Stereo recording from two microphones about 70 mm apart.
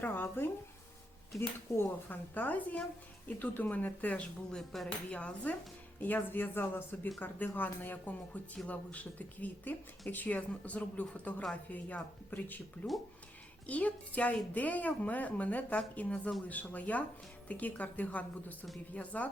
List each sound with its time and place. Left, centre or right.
0.0 s a woman's voice: left
4.5 s speech: centre
5.1 s a woman's voice: centre